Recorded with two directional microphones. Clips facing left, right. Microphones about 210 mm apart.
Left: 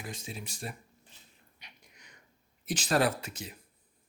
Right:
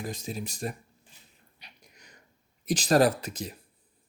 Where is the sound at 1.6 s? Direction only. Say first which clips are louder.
Right 2 dB; 35° right (ahead or behind).